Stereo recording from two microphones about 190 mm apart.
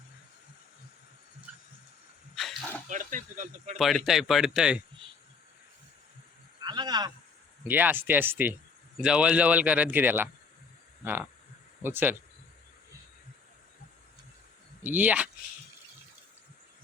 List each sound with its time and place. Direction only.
2.3 s a sound: centre (ahead or behind)
2.9 s speech: 40° right (ahead or behind)
3.8 s speech: centre (ahead or behind)
6.6 s a sound: 20° right (ahead or behind)
7.7 s speech: 10° right (ahead or behind)
14.8 s speech: 10° right (ahead or behind)